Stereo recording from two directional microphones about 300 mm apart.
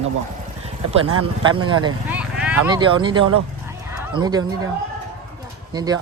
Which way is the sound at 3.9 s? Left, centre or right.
Centre.